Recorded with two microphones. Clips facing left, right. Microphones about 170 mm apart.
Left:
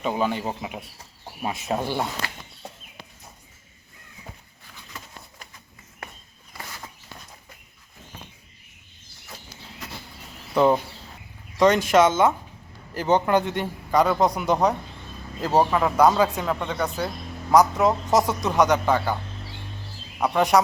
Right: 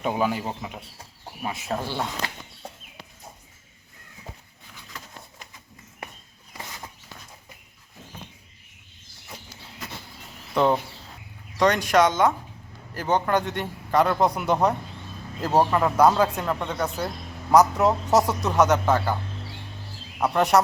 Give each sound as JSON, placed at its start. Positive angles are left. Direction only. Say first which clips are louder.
{"t": 0.0, "sound": "a man's voice", "louder": "even", "side_deg": -5}
{"t": 0.6, "sound": "speech", "louder": "left 2 dB", "side_deg": 10}
{"t": 6.5, "sound": "a sound", "louder": "even", "side_deg": -20}
{"t": 10.5, "sound": "a man's voice", "louder": "left 2 dB", "side_deg": 5}
{"t": 20.1, "sound": "speech", "louder": "even", "side_deg": -5}